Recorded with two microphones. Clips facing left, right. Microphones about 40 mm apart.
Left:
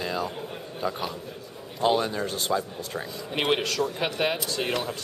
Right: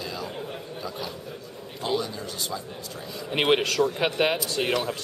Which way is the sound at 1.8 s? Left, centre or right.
Left.